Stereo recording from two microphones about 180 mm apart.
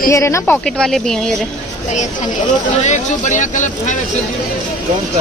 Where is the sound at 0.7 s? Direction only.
5° left (ahead or behind).